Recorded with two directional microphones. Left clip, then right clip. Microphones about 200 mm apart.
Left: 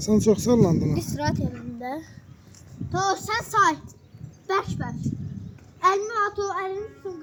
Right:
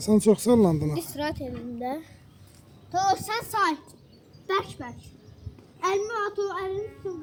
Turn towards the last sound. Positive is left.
turn(degrees=-5)  # may be behind; listen again after turning